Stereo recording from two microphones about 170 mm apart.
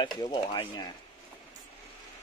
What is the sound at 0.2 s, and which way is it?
Speech, 25° left (ahead or behind).